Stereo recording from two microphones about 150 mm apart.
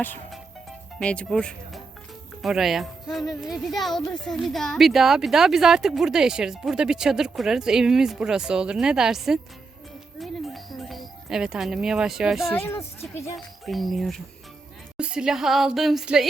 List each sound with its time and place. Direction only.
0.9 s speech: 5° left (ahead or behind)
10.2 s music: centre (ahead or behind)
12.5 s speech: 15° left (ahead or behind)
13.3 s speech: centre (ahead or behind)